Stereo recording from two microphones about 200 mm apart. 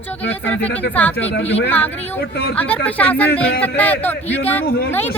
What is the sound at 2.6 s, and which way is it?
Speech, 10° left (ahead or behind).